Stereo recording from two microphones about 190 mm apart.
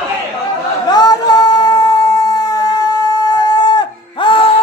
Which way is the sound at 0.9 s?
20° left (ahead or behind).